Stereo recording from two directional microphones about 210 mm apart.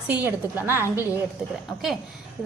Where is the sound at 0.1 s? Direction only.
10° right (ahead or behind).